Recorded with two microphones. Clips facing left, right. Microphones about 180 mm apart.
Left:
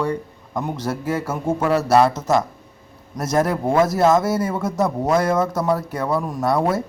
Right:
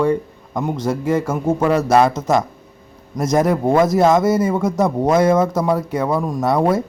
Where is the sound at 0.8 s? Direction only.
5° left (ahead or behind).